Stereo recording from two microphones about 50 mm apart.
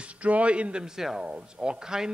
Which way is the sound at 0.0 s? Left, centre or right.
Right.